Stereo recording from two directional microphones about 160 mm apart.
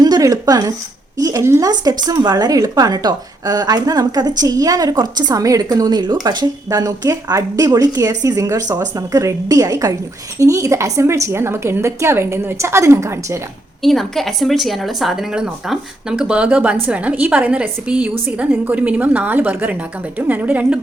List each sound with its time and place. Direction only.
0.0 s a woman's voice: 25° right (ahead or behind)
13.8 s a woman's voice: centre (ahead or behind)